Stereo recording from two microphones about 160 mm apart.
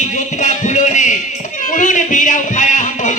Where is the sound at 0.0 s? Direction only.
50° left (ahead or behind).